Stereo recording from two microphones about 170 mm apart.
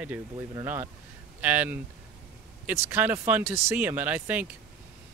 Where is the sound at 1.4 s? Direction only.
10° right (ahead or behind).